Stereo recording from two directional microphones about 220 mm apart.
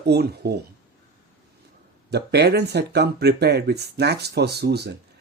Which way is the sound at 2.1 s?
50° right (ahead or behind).